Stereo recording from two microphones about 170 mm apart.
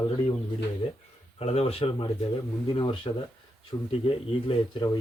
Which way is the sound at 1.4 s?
35° left (ahead or behind).